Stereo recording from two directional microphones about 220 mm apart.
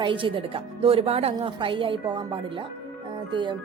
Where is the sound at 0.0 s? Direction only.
20° right (ahead or behind).